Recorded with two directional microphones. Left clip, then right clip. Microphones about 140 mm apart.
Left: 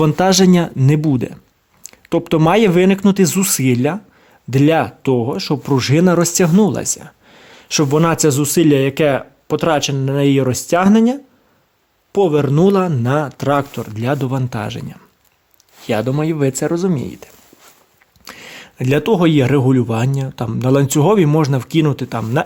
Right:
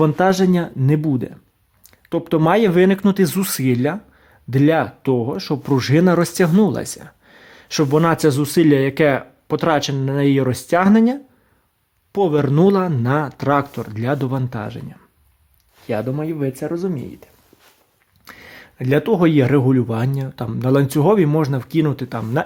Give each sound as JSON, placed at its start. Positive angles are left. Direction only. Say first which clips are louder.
{"t": 0.0, "sound": "speech", "louder": "left 3 dB", "side_deg": 15}
{"t": 14.5, "sound": "speech", "louder": "left 4 dB", "side_deg": 15}
{"t": 18.3, "sound": "speech", "louder": "left 5 dB", "side_deg": 5}